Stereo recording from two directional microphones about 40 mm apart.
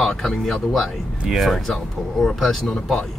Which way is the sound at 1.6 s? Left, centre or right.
Centre.